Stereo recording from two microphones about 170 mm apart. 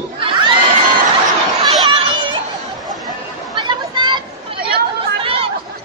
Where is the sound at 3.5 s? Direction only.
25° right (ahead or behind).